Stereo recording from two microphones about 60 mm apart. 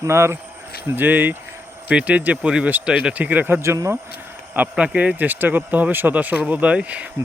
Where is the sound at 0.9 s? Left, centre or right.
Right.